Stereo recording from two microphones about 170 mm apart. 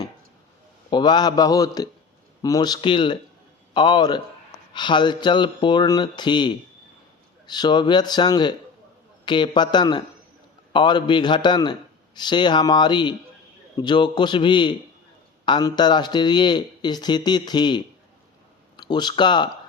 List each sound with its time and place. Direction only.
0.9 s a man's voice: 25° left (ahead or behind)